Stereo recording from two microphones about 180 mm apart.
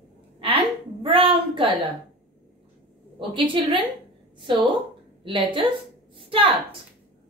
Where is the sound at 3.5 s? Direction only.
30° right (ahead or behind).